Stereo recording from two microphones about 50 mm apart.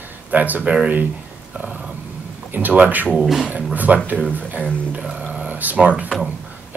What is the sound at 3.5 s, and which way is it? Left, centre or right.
Speech, right.